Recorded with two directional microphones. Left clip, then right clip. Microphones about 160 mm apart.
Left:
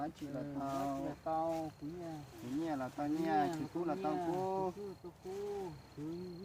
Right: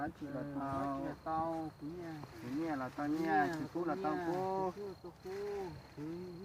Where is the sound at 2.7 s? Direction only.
15° left (ahead or behind).